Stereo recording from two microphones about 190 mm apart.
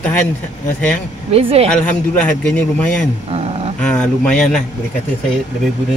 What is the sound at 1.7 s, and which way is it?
A man's voice, 5° left (ahead or behind).